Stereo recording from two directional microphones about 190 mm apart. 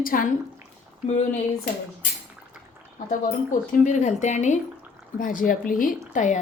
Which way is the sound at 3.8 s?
40° left (ahead or behind).